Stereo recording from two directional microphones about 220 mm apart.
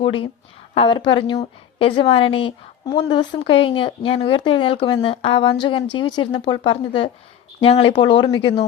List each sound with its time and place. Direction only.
0.0 s a woman's voice: 20° left (ahead or behind)